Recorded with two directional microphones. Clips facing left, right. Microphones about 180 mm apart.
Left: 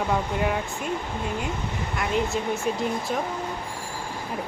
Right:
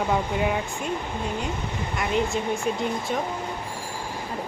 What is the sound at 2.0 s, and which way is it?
Speech, centre (ahead or behind).